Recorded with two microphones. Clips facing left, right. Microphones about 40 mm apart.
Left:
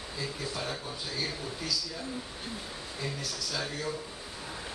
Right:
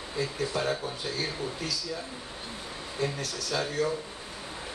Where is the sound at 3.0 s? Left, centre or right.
Right.